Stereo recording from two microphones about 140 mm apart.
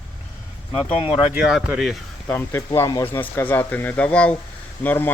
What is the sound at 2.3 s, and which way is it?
Speech, 15° left (ahead or behind).